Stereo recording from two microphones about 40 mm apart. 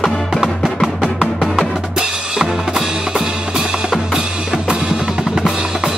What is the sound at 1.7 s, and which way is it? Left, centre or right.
Drum, centre.